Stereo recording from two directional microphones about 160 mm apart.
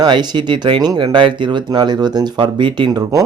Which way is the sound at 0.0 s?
25° right (ahead or behind).